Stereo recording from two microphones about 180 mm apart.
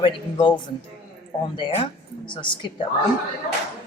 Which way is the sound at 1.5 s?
25° left (ahead or behind).